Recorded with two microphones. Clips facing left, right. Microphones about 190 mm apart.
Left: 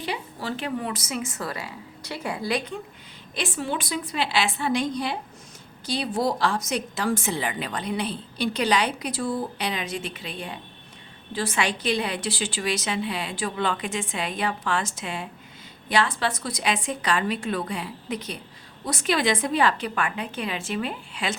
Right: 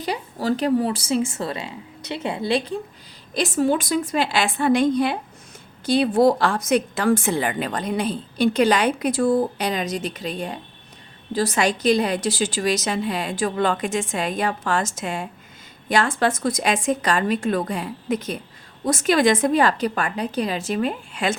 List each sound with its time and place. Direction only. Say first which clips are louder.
0.0 s speech: right 6 dB; 40° right (ahead or behind)
3.3 s a woman's voice: right 9 dB; 40° right (ahead or behind)